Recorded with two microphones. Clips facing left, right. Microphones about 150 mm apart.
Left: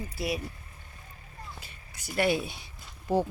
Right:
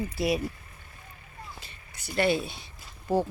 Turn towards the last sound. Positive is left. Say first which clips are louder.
# right 1 dB
turn(degrees=10)  # may be behind; listen again after turning